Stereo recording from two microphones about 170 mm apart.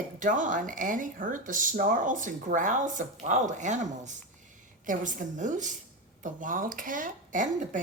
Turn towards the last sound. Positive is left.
turn(degrees=-50)  # may be behind; listen again after turning